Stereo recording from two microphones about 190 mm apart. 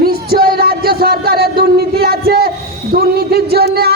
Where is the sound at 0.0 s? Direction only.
55° right (ahead or behind).